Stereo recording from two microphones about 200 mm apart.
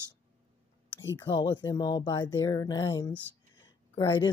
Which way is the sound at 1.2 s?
20° left (ahead or behind).